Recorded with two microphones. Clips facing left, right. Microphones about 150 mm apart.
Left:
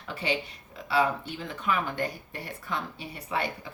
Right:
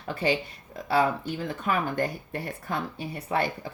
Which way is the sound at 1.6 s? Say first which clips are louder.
Right 1 dB; 45° right (ahead or behind).